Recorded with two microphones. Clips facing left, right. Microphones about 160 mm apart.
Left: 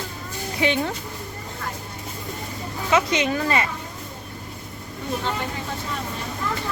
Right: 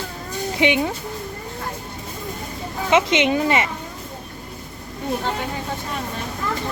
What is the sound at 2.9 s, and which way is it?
Speech, 25° right (ahead or behind).